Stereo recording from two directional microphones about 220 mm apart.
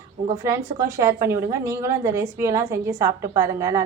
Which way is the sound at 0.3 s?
15° right (ahead or behind).